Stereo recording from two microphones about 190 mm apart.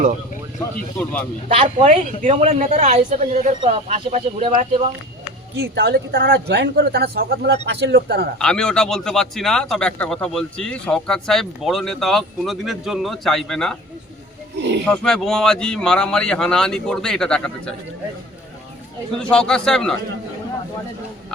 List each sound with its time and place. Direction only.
0.9 s speech: 10° left (ahead or behind)
1.5 s a woman's voice: 30° right (ahead or behind)
5.7 s speech: 60° right (ahead or behind)
8.4 s a man's voice: 5° left (ahead or behind)
14.6 s speech: 65° right (ahead or behind)
14.8 s a man's voice: centre (ahead or behind)
19.2 s a man's voice: 5° left (ahead or behind)